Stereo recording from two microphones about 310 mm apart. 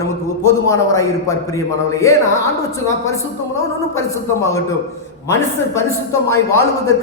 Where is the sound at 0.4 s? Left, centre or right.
Centre.